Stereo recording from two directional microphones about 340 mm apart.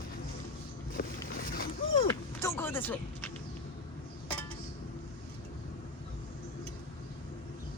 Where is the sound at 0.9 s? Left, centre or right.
Left.